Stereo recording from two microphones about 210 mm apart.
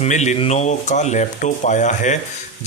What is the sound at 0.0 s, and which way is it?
Speech, 35° left (ahead or behind).